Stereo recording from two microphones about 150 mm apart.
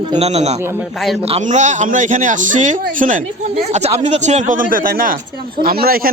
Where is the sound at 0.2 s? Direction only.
45° right (ahead or behind).